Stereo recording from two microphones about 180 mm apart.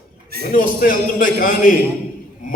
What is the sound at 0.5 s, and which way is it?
A man's voice, 50° left (ahead or behind).